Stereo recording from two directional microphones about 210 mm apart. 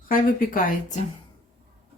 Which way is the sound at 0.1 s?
40° left (ahead or behind).